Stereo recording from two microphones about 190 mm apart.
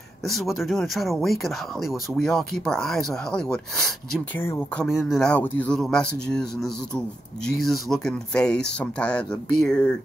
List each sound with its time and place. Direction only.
0.3 s speech: centre (ahead or behind)
4.8 s speech: centre (ahead or behind)